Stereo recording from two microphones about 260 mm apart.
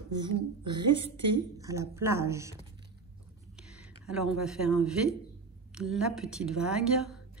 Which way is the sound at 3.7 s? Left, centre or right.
Centre.